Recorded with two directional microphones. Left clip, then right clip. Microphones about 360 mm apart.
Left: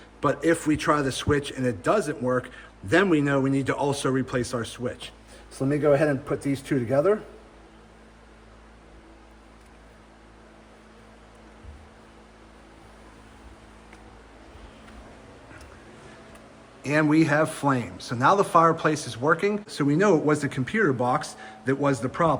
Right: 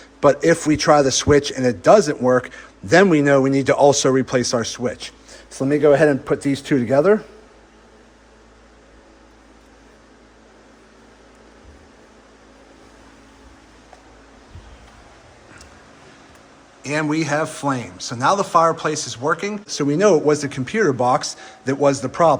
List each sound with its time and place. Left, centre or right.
0.2 s a man's voice: centre
16.8 s a man's voice: centre